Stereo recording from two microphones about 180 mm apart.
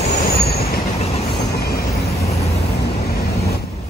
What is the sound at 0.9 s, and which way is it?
Train, 35° left (ahead or behind).